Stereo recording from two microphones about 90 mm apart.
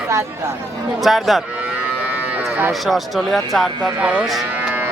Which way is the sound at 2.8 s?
Centre (ahead or behind).